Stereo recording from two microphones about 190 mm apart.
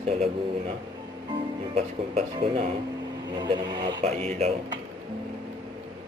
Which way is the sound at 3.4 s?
25° right (ahead or behind).